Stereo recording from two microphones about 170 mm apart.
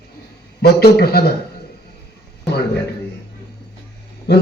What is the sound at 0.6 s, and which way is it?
Speech, 70° left (ahead or behind).